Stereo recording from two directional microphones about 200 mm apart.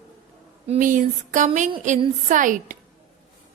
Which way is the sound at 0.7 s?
40° right (ahead or behind).